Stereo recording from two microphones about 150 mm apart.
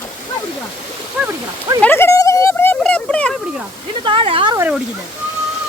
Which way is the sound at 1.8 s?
15° left (ahead or behind).